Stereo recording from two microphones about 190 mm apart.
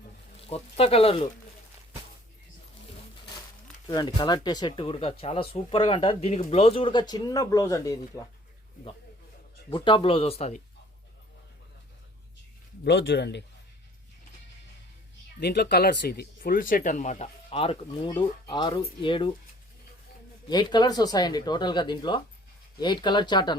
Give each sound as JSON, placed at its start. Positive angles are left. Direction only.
{"t": 0.4, "sound": "speech", "side_deg": 30}
{"t": 3.8, "sound": "speech", "side_deg": 20}
{"t": 9.6, "sound": "speech", "side_deg": 25}
{"t": 12.8, "sound": "speech", "side_deg": 65}
{"t": 15.4, "sound": "speech", "side_deg": 60}
{"t": 20.5, "sound": "speech", "side_deg": 25}